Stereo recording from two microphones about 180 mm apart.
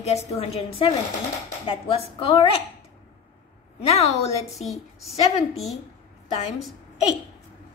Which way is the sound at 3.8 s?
35° left (ahead or behind).